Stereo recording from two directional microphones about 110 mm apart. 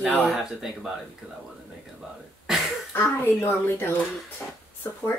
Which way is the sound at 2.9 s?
20° left (ahead or behind).